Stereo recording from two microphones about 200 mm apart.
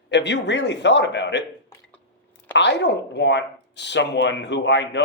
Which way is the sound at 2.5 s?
60° left (ahead or behind).